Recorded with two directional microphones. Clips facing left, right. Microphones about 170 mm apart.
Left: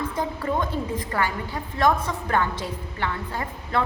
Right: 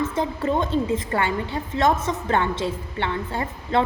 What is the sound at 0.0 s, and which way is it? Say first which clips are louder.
A woman's voice: right 4 dB; 25° right (ahead or behind).